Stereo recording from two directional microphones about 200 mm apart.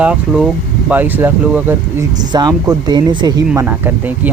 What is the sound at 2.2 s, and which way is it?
Speech, 20° right (ahead or behind).